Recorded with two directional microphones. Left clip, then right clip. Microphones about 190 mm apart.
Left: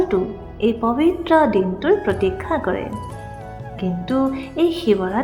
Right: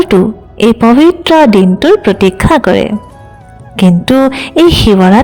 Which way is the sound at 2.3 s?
60° right (ahead or behind).